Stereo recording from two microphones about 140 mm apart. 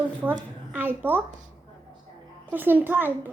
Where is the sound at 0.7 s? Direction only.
15° right (ahead or behind).